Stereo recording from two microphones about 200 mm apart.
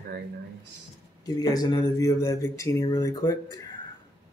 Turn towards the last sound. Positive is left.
turn(degrees=20)  # may be behind; listen again after turning